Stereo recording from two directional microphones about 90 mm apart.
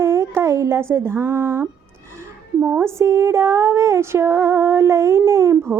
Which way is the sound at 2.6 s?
20° right (ahead or behind).